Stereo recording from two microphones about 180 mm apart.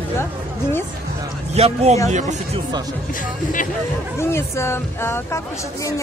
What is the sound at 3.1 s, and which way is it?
Speech, 50° left (ahead or behind).